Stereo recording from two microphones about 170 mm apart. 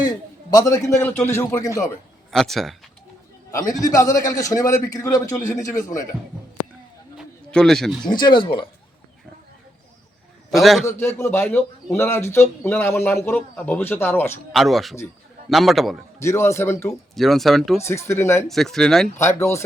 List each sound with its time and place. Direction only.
0.0 s a man's voice: 20° left (ahead or behind)
2.3 s speech: centre (ahead or behind)
3.5 s a man's voice: 20° left (ahead or behind)
7.2 s a man's voice: 5° left (ahead or behind)
8.1 s a man's voice: 25° left (ahead or behind)
10.5 s speech: centre (ahead or behind)
10.8 s a man's voice: 15° left (ahead or behind)
14.5 s speech: centre (ahead or behind)
16.1 s a man's voice: 15° left (ahead or behind)
16.9 s speech: centre (ahead or behind)
17.8 s a man's voice: 15° left (ahead or behind)
18.4 s speech: centre (ahead or behind)
19.2 s a man's voice: 15° left (ahead or behind)